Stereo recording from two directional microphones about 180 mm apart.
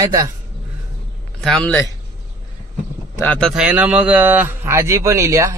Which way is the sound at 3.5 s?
5° right (ahead or behind).